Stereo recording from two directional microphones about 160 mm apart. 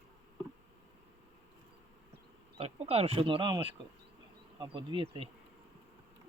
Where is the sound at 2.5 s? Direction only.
40° right (ahead or behind).